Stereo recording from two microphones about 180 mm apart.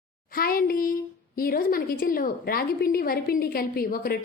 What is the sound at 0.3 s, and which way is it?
A woman's voice, 55° left (ahead or behind).